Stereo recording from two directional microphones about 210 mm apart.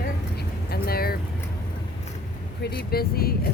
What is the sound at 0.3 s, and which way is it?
Vehicle, 45° left (ahead or behind).